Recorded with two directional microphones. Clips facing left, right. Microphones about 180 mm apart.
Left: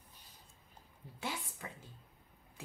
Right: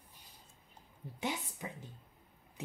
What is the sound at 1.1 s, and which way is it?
Speech, 20° right (ahead or behind).